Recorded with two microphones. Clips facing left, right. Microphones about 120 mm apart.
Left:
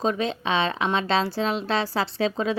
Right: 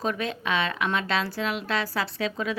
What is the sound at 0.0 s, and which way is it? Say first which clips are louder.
A woman's voice: left 4 dB; 25° left (ahead or behind).